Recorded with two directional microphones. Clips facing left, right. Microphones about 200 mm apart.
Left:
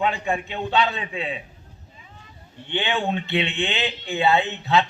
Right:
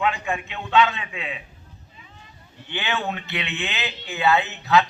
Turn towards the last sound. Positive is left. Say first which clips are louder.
# right 1 dB
turn(degrees=30)  # may be behind; listen again after turning